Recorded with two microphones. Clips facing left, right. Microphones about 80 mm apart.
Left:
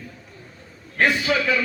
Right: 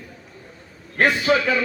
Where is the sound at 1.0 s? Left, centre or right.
Right.